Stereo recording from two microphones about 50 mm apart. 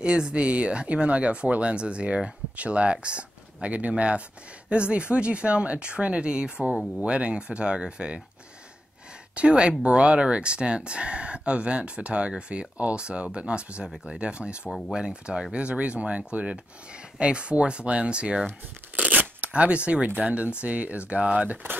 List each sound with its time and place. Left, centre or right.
0.0 s speech: right
9.3 s speech: right
18.9 s shuffling cards: right
20.2 s speech: right